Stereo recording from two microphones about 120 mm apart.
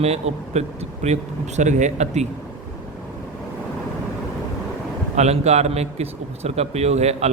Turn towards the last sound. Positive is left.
turn(degrees=-65)  # may be behind; listen again after turning